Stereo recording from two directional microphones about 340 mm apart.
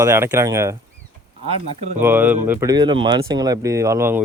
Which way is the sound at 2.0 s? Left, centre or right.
Centre.